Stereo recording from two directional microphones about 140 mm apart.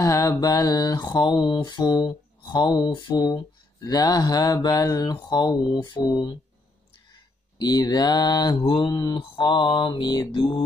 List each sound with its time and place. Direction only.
0.0 s mantra: 25° left (ahead or behind)
7.5 s mantra: 30° left (ahead or behind)